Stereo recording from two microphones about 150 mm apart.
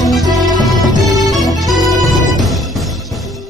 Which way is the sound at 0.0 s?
Centre (ahead or behind).